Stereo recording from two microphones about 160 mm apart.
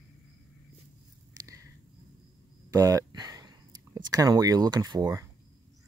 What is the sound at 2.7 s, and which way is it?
Speech, 20° right (ahead or behind).